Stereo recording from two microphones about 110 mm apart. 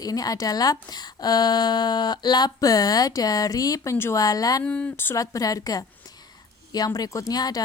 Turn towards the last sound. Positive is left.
turn(degrees=35)  # may be behind; listen again after turning